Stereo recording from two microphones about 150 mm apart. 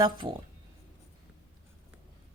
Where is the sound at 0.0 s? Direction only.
25° right (ahead or behind).